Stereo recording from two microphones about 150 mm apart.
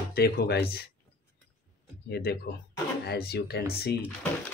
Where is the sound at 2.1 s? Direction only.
90° left.